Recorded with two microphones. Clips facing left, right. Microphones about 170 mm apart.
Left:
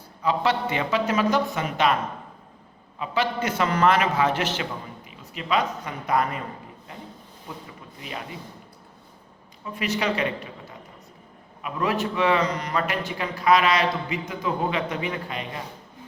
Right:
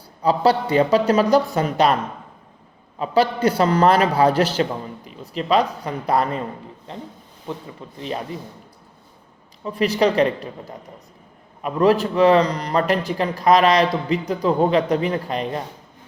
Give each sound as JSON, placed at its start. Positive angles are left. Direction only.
{"t": 0.2, "sound": "a man's voice", "side_deg": -35}
{"t": 3.0, "sound": "a man's voice", "side_deg": -35}
{"t": 7.9, "sound": "a man's voice", "side_deg": -35}
{"t": 9.6, "sound": "a man's voice", "side_deg": -35}